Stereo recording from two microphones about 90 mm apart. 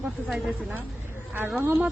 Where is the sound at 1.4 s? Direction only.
20° right (ahead or behind).